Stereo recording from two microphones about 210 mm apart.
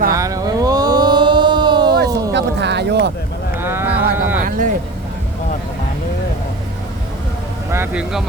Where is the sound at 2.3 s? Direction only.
55° right (ahead or behind).